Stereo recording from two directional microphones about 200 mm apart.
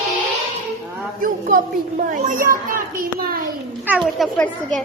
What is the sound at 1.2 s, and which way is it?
A child's voice, 40° right (ahead or behind).